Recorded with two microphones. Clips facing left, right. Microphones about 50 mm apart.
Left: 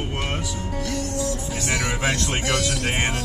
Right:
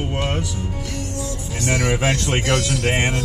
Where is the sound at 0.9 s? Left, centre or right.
Right.